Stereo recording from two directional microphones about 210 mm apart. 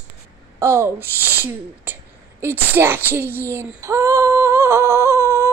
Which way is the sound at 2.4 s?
10° right (ahead or behind).